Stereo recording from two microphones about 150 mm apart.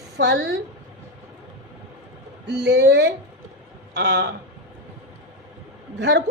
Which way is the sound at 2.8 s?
90° right.